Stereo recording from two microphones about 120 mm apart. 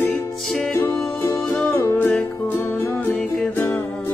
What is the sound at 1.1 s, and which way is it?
Music, 20° left (ahead or behind).